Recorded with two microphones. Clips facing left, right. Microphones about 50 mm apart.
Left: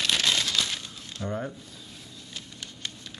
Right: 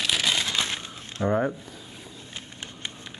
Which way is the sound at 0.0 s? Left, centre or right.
Centre.